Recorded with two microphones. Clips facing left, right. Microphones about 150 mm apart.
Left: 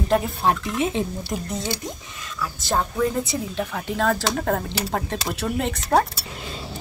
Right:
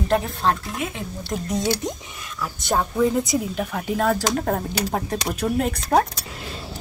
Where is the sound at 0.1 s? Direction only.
10° left (ahead or behind).